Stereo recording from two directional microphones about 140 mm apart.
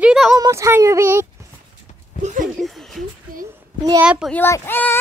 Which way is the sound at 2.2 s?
65° right (ahead or behind).